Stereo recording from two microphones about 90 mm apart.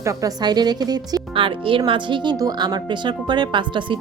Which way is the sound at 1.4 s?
75° right (ahead or behind).